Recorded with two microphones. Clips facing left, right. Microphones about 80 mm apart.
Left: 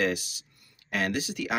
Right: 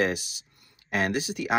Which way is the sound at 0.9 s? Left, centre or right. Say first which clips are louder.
Right 2 dB; right.